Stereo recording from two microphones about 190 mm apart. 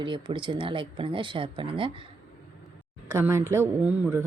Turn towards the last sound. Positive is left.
turn(degrees=-5)  # may be behind; listen again after turning